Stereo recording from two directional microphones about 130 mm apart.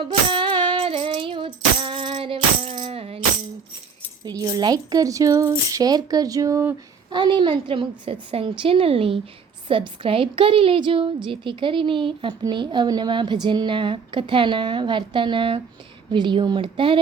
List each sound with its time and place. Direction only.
0.0 s music: 40° right (ahead or behind)
4.3 s speech: 30° right (ahead or behind)
7.1 s a woman's voice: 35° right (ahead or behind)